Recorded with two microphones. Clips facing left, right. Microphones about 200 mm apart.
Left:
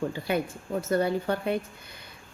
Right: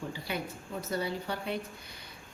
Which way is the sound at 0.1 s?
50° left (ahead or behind).